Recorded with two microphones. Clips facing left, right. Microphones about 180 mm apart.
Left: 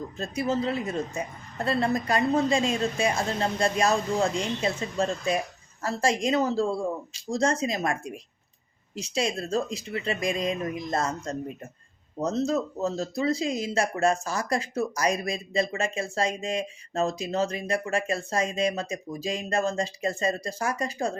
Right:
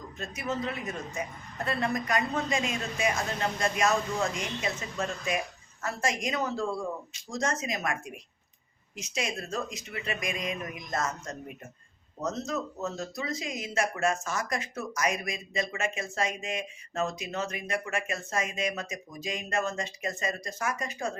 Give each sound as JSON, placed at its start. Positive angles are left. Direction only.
{"t": 0.2, "sound": "speech", "side_deg": 30}